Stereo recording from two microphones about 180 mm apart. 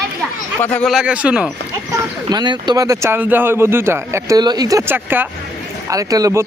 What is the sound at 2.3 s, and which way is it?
Speech, 25° right (ahead or behind).